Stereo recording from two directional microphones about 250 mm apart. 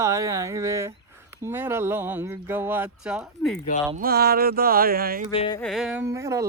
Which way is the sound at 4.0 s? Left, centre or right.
Right.